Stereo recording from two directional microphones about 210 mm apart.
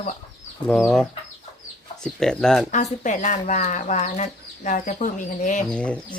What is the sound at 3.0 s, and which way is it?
Speech, 35° left (ahead or behind).